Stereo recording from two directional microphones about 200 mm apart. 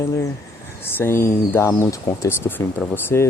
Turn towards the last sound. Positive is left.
turn(degrees=10)  # may be behind; listen again after turning